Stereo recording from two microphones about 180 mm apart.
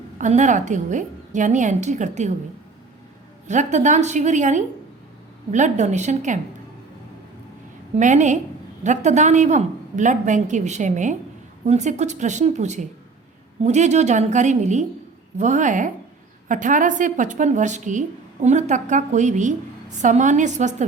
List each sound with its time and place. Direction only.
0.2 s a woman's voice: 40° right (ahead or behind)
3.4 s a woman's voice: 40° right (ahead or behind)
7.9 s a woman's voice: 40° right (ahead or behind)